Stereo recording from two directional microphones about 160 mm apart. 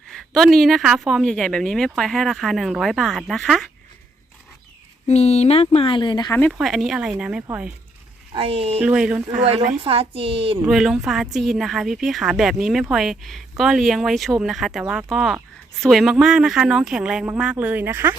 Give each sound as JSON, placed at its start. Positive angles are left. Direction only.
{"t": 0.1, "sound": "speech", "side_deg": 0}
{"t": 5.0, "sound": "speech", "side_deg": 40}
{"t": 6.5, "sound": "speech", "side_deg": 0}
{"t": 8.3, "sound": "a woman's voice", "side_deg": -35}
{"t": 8.8, "sound": "speech", "side_deg": -5}
{"t": 9.4, "sound": "a woman's voice", "side_deg": -35}
{"t": 10.7, "sound": "speech", "side_deg": 0}